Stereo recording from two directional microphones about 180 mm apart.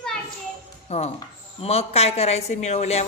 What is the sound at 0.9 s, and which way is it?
A woman's voice, 35° left (ahead or behind).